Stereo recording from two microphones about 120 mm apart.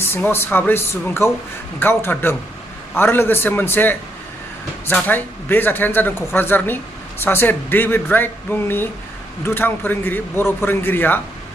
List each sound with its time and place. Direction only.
0.1 s speech: 20° left (ahead or behind)
5.0 s speech: 15° left (ahead or behind)